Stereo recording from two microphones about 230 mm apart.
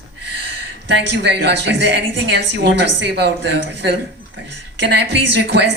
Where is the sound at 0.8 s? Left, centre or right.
Right.